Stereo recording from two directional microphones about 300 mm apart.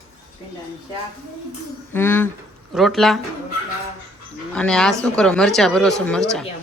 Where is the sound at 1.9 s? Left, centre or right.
Centre.